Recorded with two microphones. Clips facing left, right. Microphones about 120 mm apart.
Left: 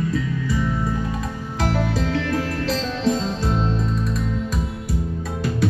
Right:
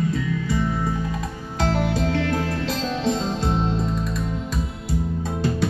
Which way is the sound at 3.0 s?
25° right (ahead or behind).